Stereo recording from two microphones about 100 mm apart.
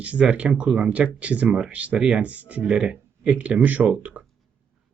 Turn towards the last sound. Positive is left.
turn(degrees=-15)  # may be behind; listen again after turning